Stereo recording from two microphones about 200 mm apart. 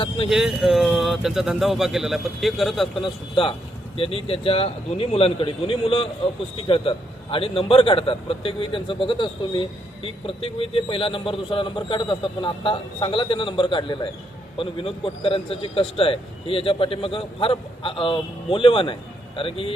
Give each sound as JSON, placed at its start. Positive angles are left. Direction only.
{"t": 0.3, "sound": "speech", "side_deg": 0}
{"t": 3.0, "sound": "a man's voice", "side_deg": 25}